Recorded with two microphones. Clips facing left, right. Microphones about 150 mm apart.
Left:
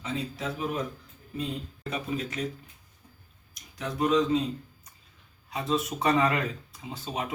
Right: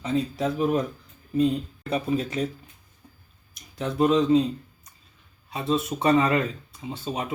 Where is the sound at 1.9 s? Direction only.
30° right (ahead or behind).